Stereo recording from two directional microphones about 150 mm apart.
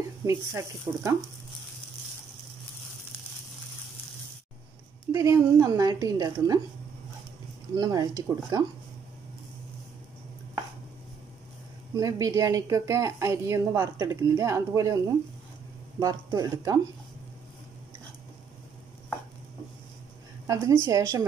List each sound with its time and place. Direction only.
0.2 s speech: 20° right (ahead or behind)
5.1 s speech: 20° right (ahead or behind)
7.7 s speech: 25° right (ahead or behind)
11.9 s speech: 25° right (ahead or behind)
20.4 s speech: 20° right (ahead or behind)